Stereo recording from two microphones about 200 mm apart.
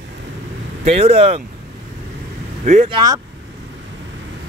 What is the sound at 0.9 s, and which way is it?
Speech, 30° right (ahead or behind).